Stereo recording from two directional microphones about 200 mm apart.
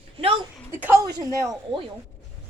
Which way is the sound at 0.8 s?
15° right (ahead or behind).